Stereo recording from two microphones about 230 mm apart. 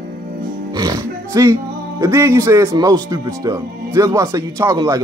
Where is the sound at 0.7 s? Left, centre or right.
Centre.